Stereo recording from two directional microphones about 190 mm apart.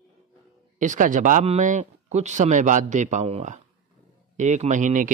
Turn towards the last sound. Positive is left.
turn(degrees=-40)  # may be behind; listen again after turning